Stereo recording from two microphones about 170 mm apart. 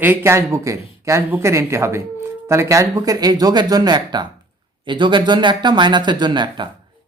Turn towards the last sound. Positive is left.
turn(degrees=-25)  # may be behind; listen again after turning